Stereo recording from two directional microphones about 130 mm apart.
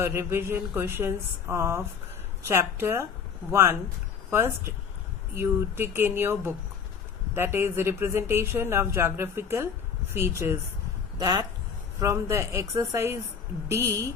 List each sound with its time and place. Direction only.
0.0 s speech: 20° right (ahead or behind)